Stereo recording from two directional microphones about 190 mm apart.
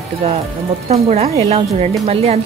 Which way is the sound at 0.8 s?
35° right (ahead or behind).